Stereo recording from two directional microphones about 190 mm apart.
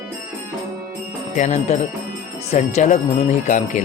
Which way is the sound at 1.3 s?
40° left (ahead or behind).